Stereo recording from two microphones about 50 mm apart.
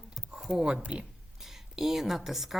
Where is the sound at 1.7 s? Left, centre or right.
Centre.